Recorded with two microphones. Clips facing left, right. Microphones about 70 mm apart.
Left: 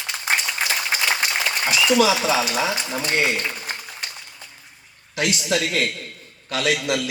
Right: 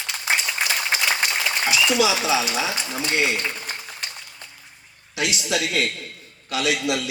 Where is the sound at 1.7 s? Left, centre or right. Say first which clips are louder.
Left 3 dB; left.